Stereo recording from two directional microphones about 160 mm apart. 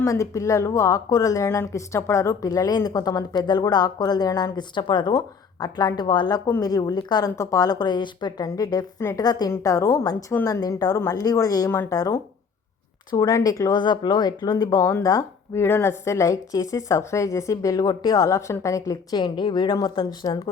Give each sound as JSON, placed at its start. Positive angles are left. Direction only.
{"t": 0.0, "sound": "speech", "side_deg": 20}